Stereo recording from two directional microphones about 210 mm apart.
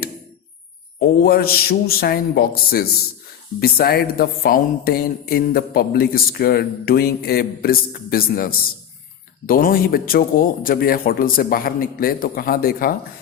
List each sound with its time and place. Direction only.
0.9 s speech: 45° left (ahead or behind)